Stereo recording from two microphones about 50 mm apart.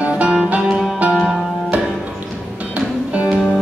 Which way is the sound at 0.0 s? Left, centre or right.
Right.